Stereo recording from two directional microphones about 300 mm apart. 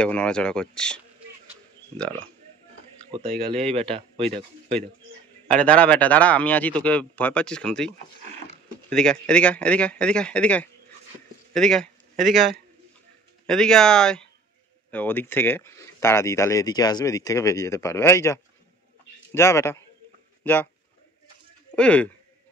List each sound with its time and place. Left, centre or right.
0.0 s speech: centre
1.5 s a sound: centre
3.3 s speech: centre
5.5 s speech: centre
21.7 s speech: centre